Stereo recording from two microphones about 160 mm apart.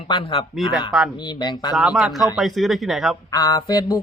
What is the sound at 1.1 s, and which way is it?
Speech, 25° left (ahead or behind).